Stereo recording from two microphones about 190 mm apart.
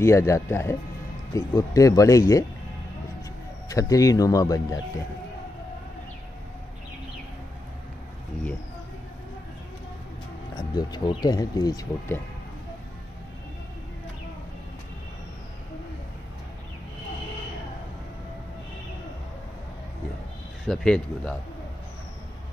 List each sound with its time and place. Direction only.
0.0 s speech: 15° left (ahead or behind)
3.6 s speech: 15° left (ahead or behind)
10.5 s speech: 25° left (ahead or behind)
20.6 s speech: centre (ahead or behind)